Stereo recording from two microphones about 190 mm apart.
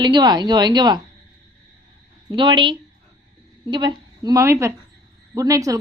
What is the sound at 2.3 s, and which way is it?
A woman's voice, 25° right (ahead or behind).